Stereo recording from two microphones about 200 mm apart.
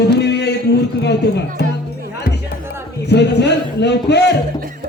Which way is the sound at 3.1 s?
55° left (ahead or behind).